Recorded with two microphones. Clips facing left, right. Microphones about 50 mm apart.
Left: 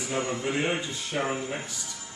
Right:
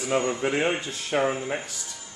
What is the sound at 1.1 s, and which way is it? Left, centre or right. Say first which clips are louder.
Speech: right 6 dB; right.